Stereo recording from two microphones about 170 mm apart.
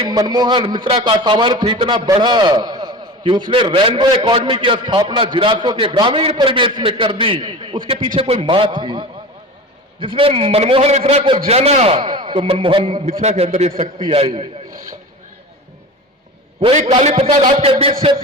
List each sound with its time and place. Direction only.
0.1 s a man's voice: 25° right (ahead or behind)
16.7 s a man's voice: 40° right (ahead or behind)